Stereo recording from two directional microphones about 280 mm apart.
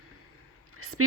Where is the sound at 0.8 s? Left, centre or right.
Right.